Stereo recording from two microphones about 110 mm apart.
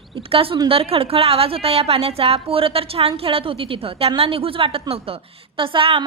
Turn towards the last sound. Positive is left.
turn(degrees=-55)  # may be behind; listen again after turning